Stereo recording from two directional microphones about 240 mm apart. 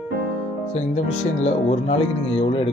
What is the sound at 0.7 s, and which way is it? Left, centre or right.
Speech, left.